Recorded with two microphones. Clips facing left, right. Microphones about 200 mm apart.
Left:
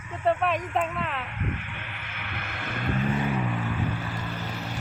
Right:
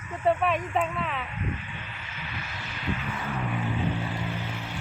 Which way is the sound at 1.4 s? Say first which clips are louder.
Left 1 dB; 65° left (ahead or behind).